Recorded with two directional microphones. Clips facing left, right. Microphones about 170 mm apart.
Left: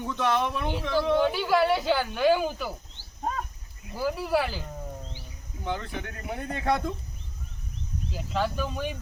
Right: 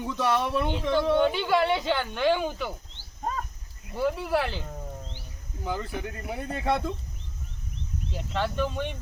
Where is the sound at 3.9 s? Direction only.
Centre (ahead or behind).